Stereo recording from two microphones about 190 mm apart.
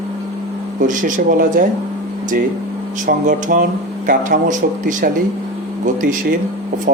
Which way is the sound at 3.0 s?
45° right (ahead or behind).